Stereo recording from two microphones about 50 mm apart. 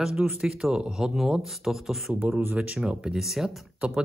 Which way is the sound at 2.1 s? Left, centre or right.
Right.